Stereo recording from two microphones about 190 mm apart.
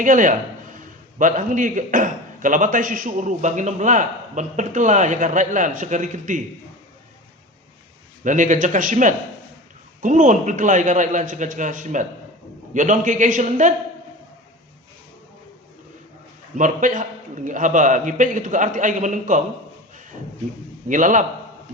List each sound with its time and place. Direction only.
0.0 s a man's voice: 45° right (ahead or behind)
8.2 s a man's voice: 40° right (ahead or behind)
16.6 s a man's voice: 40° right (ahead or behind)
20.8 s a man's voice: 40° right (ahead or behind)